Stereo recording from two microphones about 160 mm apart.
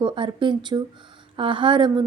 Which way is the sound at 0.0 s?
30° right (ahead or behind).